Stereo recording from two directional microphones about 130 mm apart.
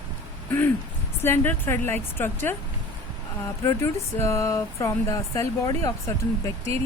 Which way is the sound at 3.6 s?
25° left (ahead or behind).